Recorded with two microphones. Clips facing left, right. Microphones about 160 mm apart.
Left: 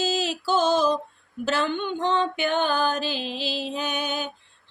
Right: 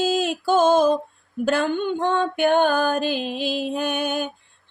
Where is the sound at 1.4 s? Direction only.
50° right (ahead or behind).